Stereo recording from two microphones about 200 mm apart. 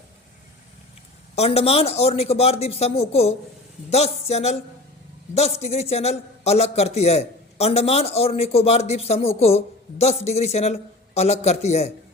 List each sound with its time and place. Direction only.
1.4 s a man's voice: 30° left (ahead or behind)